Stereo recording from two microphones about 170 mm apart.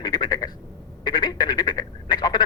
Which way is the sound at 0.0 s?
25° left (ahead or behind).